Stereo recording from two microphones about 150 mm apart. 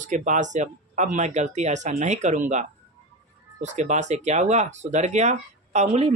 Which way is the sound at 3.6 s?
50° right (ahead or behind).